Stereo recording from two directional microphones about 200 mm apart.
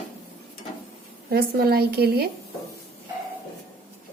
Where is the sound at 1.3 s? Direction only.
50° right (ahead or behind).